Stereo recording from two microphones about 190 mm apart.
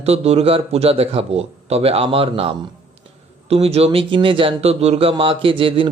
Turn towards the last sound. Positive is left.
turn(degrees=-25)  # may be behind; listen again after turning